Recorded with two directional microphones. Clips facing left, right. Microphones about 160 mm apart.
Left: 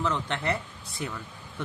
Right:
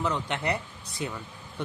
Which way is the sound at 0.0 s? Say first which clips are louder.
Even; 20° right (ahead or behind).